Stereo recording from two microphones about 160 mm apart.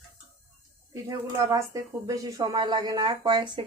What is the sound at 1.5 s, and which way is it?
Speech, 20° right (ahead or behind).